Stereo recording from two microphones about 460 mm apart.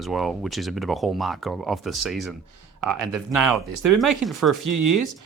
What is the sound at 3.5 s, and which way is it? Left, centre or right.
Speech, right.